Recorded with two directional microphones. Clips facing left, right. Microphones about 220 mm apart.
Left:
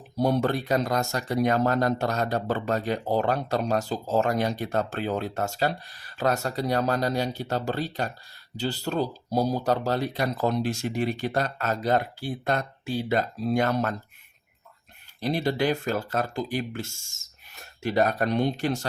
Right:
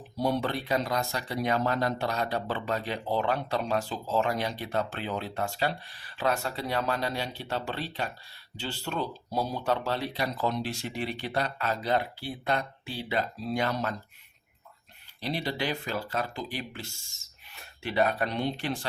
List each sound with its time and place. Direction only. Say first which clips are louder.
0.2 s speech: left 5 dB; 45° left (ahead or behind)
15.2 s speech: left 6 dB; 45° left (ahead or behind)